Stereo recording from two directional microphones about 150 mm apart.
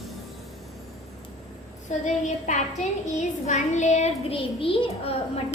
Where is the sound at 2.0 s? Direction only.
50° left (ahead or behind).